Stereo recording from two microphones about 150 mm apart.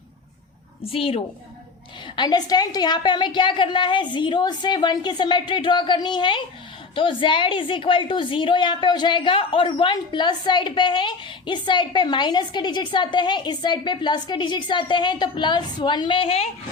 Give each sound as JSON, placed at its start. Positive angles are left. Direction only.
{"t": 0.8, "sound": "a woman's voice", "side_deg": 40}
{"t": 2.1, "sound": "a woman's voice", "side_deg": 30}